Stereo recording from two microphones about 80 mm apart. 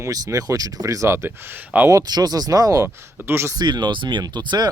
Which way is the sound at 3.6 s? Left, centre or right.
Right.